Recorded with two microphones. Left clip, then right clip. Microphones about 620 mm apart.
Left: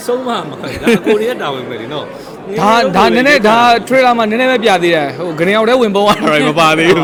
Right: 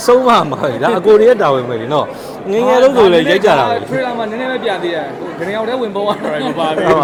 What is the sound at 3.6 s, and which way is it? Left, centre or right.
A man's voice, left.